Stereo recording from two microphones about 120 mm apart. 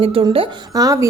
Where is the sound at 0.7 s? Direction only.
30° right (ahead or behind).